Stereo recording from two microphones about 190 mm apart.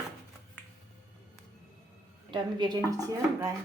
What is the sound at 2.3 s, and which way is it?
Speech, 25° right (ahead or behind).